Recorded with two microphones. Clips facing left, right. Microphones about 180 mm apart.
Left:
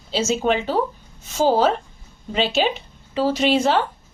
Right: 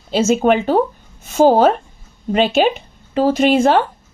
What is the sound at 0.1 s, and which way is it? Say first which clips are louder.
A woman's voice: right 6 dB; 55° right (ahead or behind).